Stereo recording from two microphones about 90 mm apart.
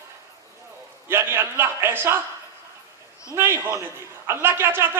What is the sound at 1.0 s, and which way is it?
A man's voice, 25° right (ahead or behind).